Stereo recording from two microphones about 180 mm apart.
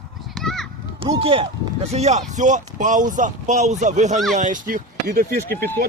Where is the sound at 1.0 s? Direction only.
30° right (ahead or behind).